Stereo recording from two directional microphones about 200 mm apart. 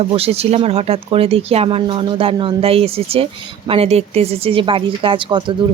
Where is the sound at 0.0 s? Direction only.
30° right (ahead or behind).